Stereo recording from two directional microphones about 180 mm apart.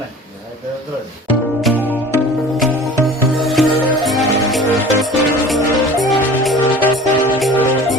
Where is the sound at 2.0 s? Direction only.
15° right (ahead or behind).